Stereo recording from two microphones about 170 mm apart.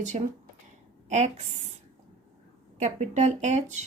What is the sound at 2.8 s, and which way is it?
A woman's voice, 45° right (ahead or behind).